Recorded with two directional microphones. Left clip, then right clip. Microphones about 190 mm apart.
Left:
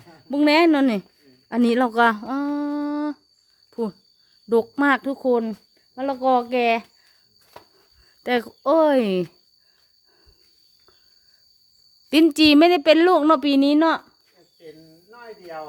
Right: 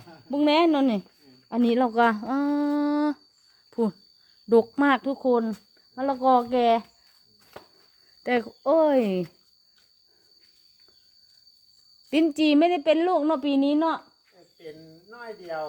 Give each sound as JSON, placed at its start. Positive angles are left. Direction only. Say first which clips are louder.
{"t": 0.3, "sound": "speech", "louder": "left 4 dB", "side_deg": 20}
{"t": 1.5, "sound": "a sound", "louder": "left 3 dB", "side_deg": 20}
{"t": 4.4, "sound": "speech", "louder": "left 1 dB", "side_deg": 0}
{"t": 8.2, "sound": "speech", "louder": "left 3 dB", "side_deg": 15}
{"t": 12.1, "sound": "a woman's voice", "louder": "left 6 dB", "side_deg": 30}
{"t": 15.1, "sound": "cricket", "louder": "right 2 dB", "side_deg": -45}